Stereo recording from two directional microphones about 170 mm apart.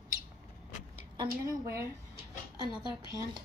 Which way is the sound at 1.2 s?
25° right (ahead or behind).